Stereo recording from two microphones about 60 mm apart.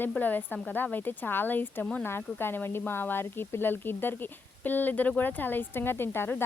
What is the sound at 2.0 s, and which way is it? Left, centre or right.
Speech, left.